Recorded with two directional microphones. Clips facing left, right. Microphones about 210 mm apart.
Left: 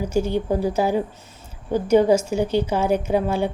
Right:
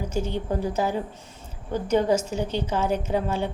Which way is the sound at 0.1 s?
10° left (ahead or behind).